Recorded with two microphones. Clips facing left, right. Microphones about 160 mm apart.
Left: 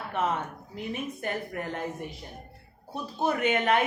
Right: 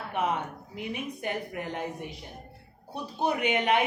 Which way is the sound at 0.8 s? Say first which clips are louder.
Left 1 dB; 15° right (ahead or behind).